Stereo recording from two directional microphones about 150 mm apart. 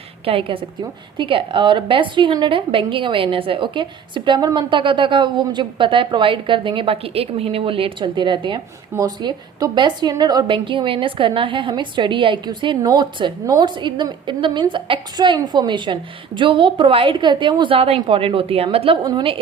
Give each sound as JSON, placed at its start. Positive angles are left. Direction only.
{"t": 0.3, "sound": "a woman's voice", "side_deg": -35}